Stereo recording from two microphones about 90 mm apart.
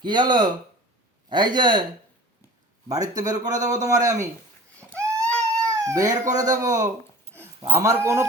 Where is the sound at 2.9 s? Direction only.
40° right (ahead or behind).